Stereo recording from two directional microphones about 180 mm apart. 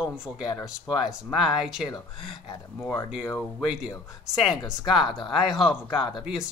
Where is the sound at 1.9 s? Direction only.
25° left (ahead or behind).